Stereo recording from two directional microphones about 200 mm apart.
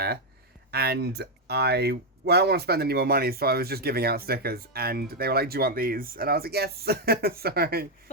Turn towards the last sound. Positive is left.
turn(degrees=-50)  # may be behind; listen again after turning